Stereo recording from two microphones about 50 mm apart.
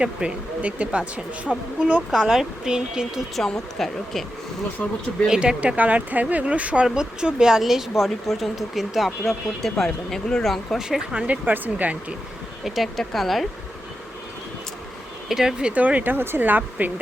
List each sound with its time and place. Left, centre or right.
0.0 s speech: right
2.0 s speech: centre
3.3 s speech: centre
4.8 s speech: left
5.3 s speech: centre
5.5 s speech: right; by 10.8 s centre
10.8 s speech: centre
11.1 s speech: right
12.6 s speech: centre
15.3 s speech: centre
15.5 s speech: right
16.0 s speech: right
16.4 s speech: right